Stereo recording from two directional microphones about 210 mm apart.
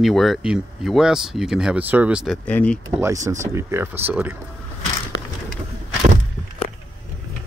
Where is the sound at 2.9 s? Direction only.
15° right (ahead or behind).